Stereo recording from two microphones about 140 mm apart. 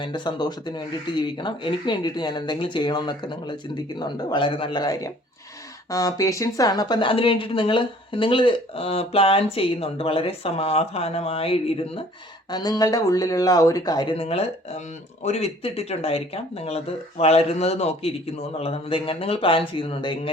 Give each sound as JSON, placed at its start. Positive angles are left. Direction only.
{"t": 0.0, "sound": "a woman's voice", "side_deg": 30}
{"t": 12.5, "sound": "speech", "side_deg": 30}